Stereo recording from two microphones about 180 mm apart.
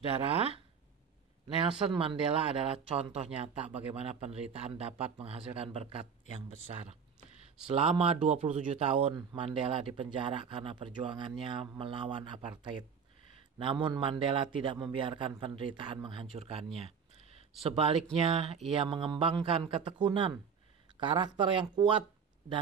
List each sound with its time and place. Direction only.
1.6 s speech: 30° right (ahead or behind)